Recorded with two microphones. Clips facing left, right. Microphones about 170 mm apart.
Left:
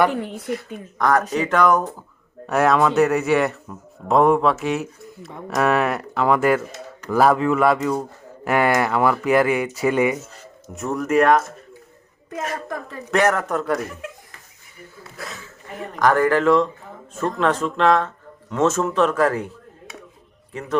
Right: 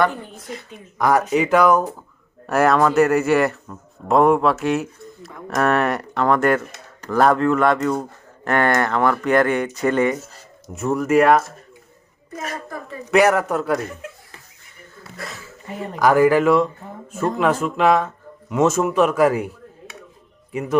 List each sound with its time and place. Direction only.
0.1 s speech: 75° left (ahead or behind)
0.9 s speech: 10° right (ahead or behind); by 10.2 s 10° left (ahead or behind)
10.8 s speech: 5° right (ahead or behind)
13.1 s speech: 5° right (ahead or behind)
15.1 s speech: centre (ahead or behind)
20.5 s a man's voice: 10° right (ahead or behind)